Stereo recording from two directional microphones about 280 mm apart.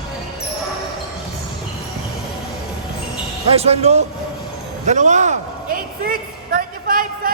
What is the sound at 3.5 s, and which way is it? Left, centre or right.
Speech, right.